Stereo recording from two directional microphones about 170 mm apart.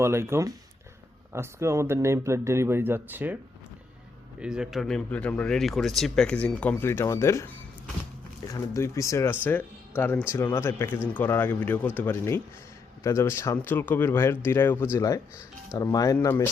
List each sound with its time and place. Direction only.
0.0 s speech: 15° right (ahead or behind)
4.4 s speech: 5° right (ahead or behind); by 7.5 s 15° left (ahead or behind)
8.5 s speech: 20° left (ahead or behind)
16.2 s speech: 10° left (ahead or behind)